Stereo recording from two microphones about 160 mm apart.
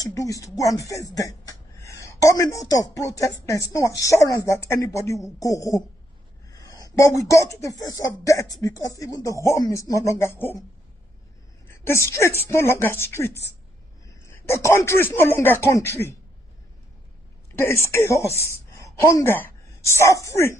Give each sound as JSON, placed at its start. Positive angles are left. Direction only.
{"t": 0.0, "sound": "a woman's voice", "side_deg": 20}
{"t": 6.5, "sound": "a sound", "side_deg": 20}
{"t": 7.2, "sound": "speech", "side_deg": 20}
{"t": 11.8, "sound": "speech", "side_deg": 15}
{"t": 17.6, "sound": "a woman's voice", "side_deg": 15}